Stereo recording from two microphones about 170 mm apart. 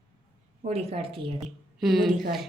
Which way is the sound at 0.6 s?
35° right (ahead or behind).